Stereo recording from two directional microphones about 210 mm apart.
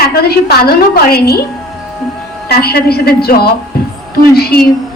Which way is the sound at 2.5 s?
50° left (ahead or behind).